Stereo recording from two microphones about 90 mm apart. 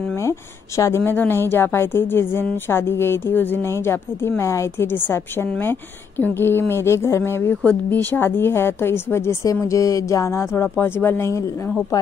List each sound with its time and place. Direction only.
0.2 s speech: 35° left (ahead or behind)
1.0 s a woman's voice: 20° left (ahead or behind)